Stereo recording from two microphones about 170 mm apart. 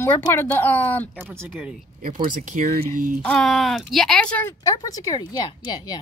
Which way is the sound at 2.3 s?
50° right (ahead or behind).